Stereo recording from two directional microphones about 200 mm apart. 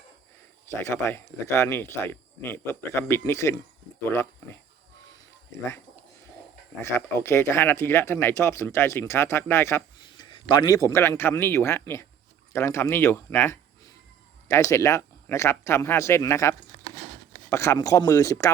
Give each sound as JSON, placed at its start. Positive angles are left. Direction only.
{"t": 0.7, "sound": "speech", "side_deg": 10}
{"t": 6.8, "sound": "speech", "side_deg": 10}